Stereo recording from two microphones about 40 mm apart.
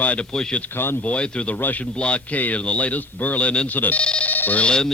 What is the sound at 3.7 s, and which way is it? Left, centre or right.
Speech, left.